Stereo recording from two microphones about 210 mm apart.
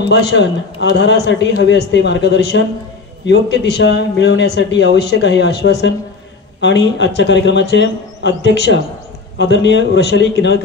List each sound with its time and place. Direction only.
0.0 s a man's voice: 55° left (ahead or behind)